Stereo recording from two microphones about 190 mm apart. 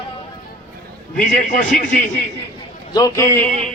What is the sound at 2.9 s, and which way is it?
Speech, 20° left (ahead or behind).